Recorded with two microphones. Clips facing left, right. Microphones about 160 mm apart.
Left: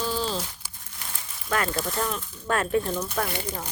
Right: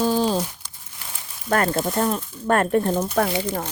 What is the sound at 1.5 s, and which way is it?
Speech, 45° right (ahead or behind).